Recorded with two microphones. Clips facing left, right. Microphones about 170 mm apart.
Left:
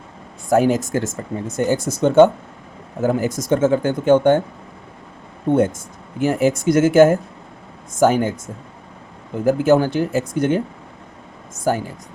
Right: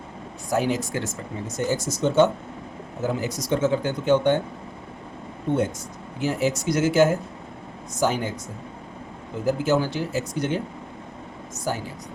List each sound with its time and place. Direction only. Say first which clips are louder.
0.5 s speech: left 8 dB; 50° left (ahead or behind)
5.5 s speech: left 7 dB; 50° left (ahead or behind)
9.4 s speech: left 7 dB; 55° left (ahead or behind)